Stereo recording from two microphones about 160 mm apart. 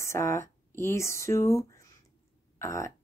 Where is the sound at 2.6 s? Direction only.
15° left (ahead or behind).